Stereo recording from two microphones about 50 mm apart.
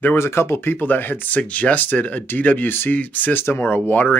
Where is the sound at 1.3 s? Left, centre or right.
Left.